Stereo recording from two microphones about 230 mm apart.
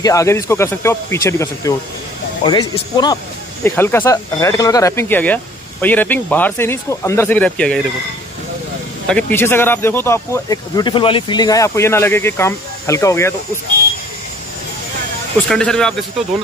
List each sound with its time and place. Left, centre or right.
0.0 s speech: centre
9.0 s speech: centre
15.4 s speech: centre